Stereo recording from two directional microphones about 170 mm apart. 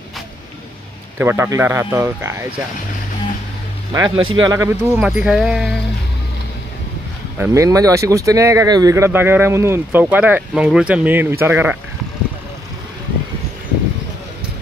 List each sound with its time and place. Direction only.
1.1 s speech: 10° right (ahead or behind)
3.9 s speech: 25° right (ahead or behind); by 5.8 s centre (ahead or behind)
7.3 s speech: 15° right (ahead or behind)